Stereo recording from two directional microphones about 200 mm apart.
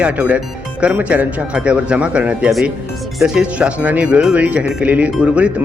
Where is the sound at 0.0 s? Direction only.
5° right (ahead or behind).